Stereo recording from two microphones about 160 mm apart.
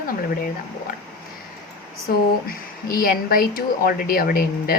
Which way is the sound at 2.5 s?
65° left (ahead or behind).